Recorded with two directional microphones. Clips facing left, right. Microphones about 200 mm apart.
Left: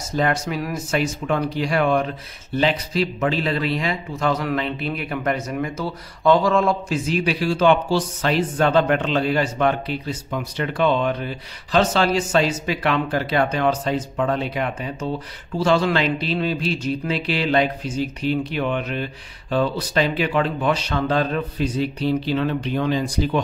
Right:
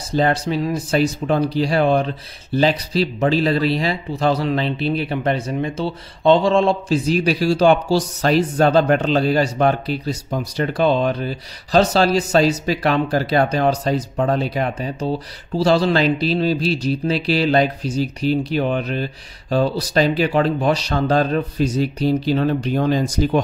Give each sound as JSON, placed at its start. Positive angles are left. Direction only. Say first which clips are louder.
{"t": 0.1, "sound": "speech", "louder": "right 4 dB", "side_deg": -30}